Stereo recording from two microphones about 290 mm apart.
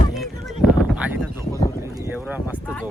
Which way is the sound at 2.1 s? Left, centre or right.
Centre.